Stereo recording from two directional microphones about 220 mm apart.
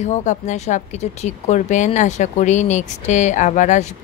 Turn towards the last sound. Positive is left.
turn(degrees=30)  # may be behind; listen again after turning